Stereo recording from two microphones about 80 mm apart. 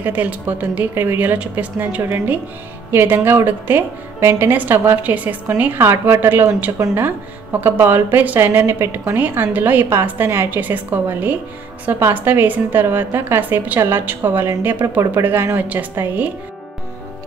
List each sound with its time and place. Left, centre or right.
0.0 s a woman's voice: centre